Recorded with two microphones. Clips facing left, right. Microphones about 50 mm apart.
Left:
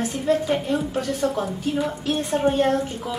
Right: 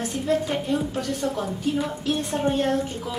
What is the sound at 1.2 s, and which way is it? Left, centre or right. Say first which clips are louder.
Speech: left 5 dB; left.